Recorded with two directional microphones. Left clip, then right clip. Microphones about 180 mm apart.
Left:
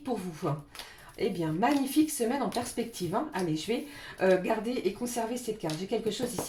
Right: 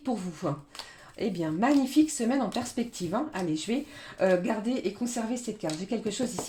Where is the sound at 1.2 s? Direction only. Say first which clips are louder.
Even; 40° right (ahead or behind).